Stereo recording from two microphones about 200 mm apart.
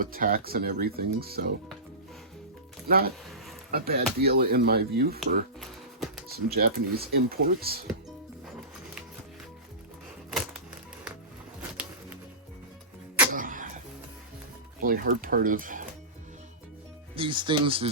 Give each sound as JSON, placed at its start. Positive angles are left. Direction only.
{"t": 0.0, "sound": "speech", "side_deg": -45}
{"t": 2.8, "sound": "speech", "side_deg": -50}
{"t": 13.3, "sound": "a sound", "side_deg": -45}
{"t": 14.8, "sound": "speech", "side_deg": -45}
{"t": 17.2, "sound": "speech", "side_deg": -25}